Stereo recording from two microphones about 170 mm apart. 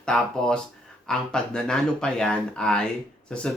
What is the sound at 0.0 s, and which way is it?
Speech, 5° left (ahead or behind).